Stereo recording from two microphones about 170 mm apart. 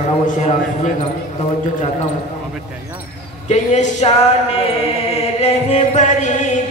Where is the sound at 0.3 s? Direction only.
45° left (ahead or behind).